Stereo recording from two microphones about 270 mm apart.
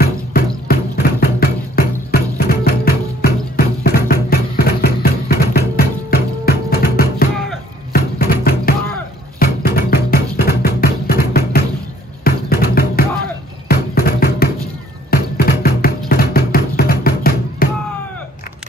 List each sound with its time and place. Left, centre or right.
0.0 s music: left